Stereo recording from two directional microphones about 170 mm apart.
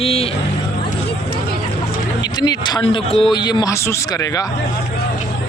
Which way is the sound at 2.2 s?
25° left (ahead or behind).